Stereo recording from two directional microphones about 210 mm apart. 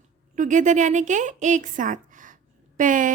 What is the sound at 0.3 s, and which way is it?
A woman's voice, 35° right (ahead or behind).